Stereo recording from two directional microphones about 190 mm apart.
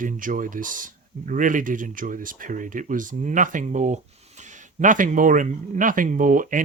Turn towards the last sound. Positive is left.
turn(degrees=-45)  # may be behind; listen again after turning